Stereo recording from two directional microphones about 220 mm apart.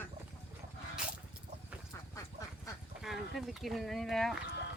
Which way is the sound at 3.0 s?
Centre (ahead or behind).